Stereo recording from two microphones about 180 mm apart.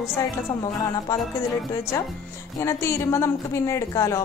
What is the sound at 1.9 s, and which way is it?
A woman's voice, 15° left (ahead or behind).